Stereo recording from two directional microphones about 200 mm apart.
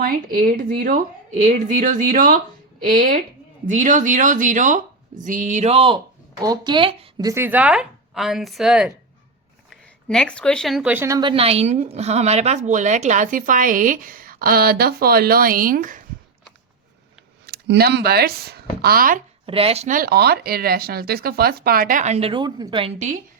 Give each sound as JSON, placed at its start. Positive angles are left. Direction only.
{"t": 0.0, "sound": "speech", "side_deg": -45}
{"t": 17.4, "sound": "speech", "side_deg": -55}
{"t": 19.5, "sound": "speech", "side_deg": -30}